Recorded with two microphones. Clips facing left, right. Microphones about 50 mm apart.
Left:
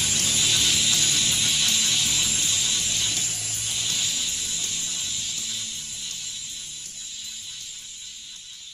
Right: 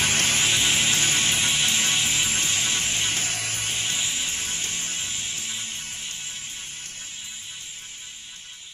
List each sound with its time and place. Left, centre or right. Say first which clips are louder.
0.0 s music: right 4 dB; right